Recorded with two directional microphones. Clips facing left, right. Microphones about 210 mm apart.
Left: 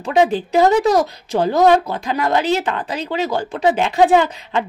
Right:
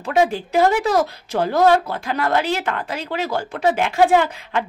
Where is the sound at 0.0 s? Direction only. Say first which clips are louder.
Left 3 dB; 20° left (ahead or behind).